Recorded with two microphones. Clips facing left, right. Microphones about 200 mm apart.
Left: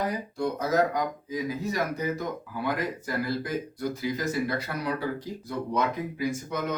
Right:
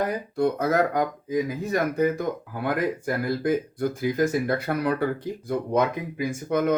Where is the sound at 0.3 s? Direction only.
55° right (ahead or behind).